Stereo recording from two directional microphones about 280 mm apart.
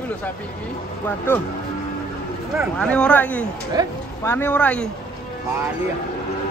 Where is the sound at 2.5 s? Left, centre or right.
Centre.